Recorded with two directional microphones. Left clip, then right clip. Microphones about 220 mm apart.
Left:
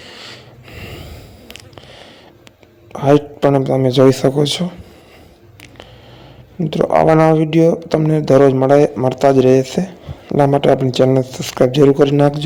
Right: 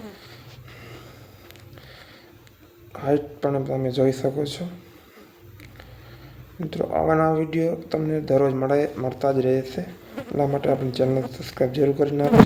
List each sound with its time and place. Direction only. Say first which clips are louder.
0.2 s sniff: left 11 dB; 40° left (ahead or behind)
2.9 s speech: left 10 dB; 35° left (ahead or behind)
6.7 s speech: left 10 dB; 35° left (ahead or behind)